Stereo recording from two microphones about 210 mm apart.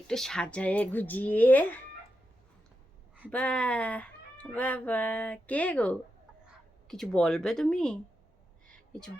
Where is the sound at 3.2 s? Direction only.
5° left (ahead or behind).